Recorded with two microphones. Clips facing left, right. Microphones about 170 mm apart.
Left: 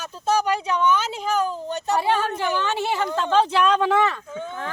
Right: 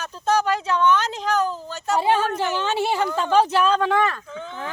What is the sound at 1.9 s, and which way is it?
Speech, 15° right (ahead or behind).